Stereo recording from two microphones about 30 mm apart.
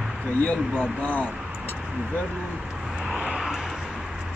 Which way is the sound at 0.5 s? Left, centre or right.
Left.